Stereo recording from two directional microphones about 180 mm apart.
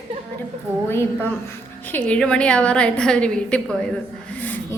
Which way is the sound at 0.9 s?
10° left (ahead or behind).